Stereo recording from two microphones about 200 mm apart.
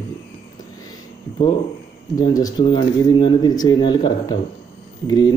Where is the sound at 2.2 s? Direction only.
20° left (ahead or behind).